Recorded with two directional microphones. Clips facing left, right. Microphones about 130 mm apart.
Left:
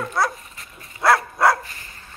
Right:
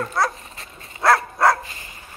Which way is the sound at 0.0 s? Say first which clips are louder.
Even; 5° left (ahead or behind).